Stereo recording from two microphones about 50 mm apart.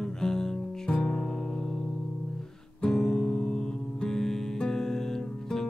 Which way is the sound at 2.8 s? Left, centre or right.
Centre.